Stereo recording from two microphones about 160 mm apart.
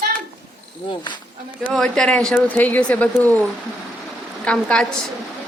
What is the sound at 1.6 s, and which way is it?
Speech, 5° left (ahead or behind).